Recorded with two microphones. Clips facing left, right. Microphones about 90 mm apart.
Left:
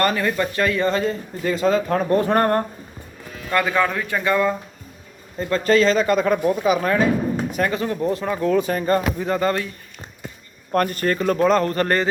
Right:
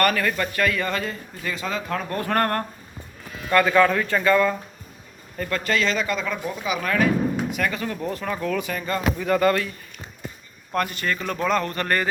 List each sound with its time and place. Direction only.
0.0 s speech: 25° left (ahead or behind)
7.9 s speech: 20° left (ahead or behind)
10.7 s speech: 45° left (ahead or behind)